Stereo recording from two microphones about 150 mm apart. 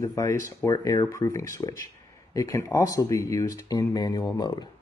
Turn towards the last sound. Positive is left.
turn(degrees=30)  # may be behind; listen again after turning